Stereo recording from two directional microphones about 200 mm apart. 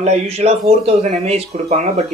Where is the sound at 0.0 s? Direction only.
30° right (ahead or behind).